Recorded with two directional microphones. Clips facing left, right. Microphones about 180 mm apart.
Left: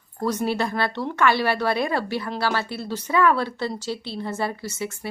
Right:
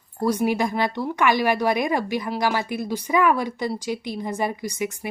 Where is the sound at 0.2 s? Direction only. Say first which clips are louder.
Right 3 dB; 10° right (ahead or behind).